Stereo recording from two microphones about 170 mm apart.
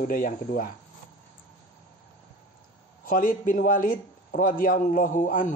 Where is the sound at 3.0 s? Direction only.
55° left (ahead or behind).